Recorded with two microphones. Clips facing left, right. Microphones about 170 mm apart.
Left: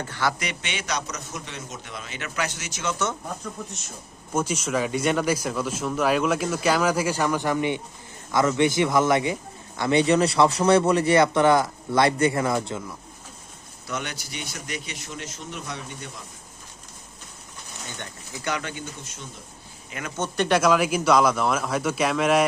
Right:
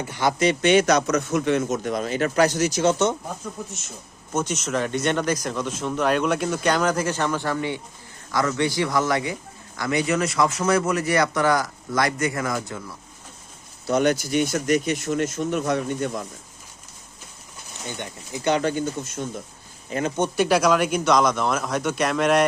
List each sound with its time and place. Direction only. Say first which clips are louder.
0.0 s speech: right 6 dB; 15° right (ahead or behind)
0.6 s speech: right 15 dB; 45° right (ahead or behind)
3.6 s speech: right 2 dB; 5° right (ahead or behind)
4.4 s a man's voice: even; 10° left (ahead or behind); by 12.8 s 25° left (ahead or behind)
13.8 s speech: right 13 dB; 40° right (ahead or behind)
18.0 s speech: right 7 dB; 25° right (ahead or behind)
18.6 s speech: right 11 dB; 45° right (ahead or behind)
19.9 s speech: right 10 dB; 30° right (ahead or behind)
20.1 s speech: right 1 dB; 10° right (ahead or behind)